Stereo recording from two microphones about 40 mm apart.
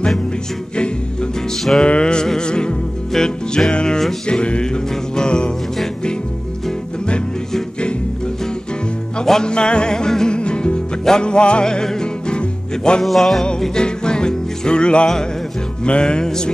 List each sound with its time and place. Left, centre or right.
1.8 s music: left
9.2 s music: centre
13.0 s music: centre
13.6 s music: centre